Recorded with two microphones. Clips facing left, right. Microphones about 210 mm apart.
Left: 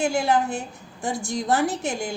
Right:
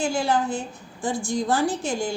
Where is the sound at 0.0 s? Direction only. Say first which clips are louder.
Left 1 dB; 20° left (ahead or behind).